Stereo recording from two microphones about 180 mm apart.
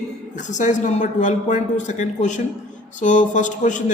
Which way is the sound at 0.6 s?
45° left (ahead or behind).